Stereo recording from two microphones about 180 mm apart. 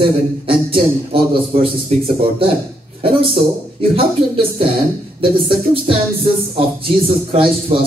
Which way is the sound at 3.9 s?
30° right (ahead or behind).